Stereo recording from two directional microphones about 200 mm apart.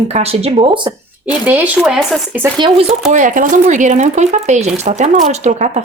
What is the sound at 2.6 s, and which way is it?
Speech, 30° right (ahead or behind).